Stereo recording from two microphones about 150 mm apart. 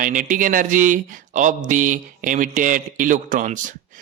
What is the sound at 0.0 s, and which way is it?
Speech, 60° right (ahead or behind).